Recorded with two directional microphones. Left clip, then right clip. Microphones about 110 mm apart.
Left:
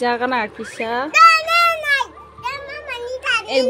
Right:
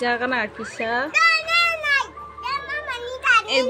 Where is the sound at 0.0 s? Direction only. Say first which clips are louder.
Left 3 dB; 25° left (ahead or behind).